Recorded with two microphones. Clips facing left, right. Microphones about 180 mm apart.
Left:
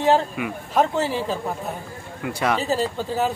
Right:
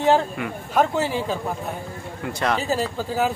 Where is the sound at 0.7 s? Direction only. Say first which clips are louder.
Even; centre (ahead or behind).